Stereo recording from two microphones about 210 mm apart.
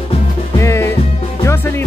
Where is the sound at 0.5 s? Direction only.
15° left (ahead or behind).